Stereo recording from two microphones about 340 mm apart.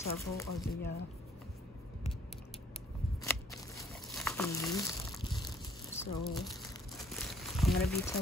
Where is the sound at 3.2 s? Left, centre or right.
Centre.